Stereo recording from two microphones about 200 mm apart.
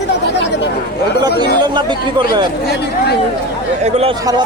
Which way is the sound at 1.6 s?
20° right (ahead or behind).